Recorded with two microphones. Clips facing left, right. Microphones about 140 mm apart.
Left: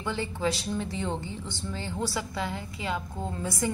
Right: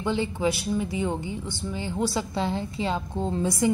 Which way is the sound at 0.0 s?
20° right (ahead or behind).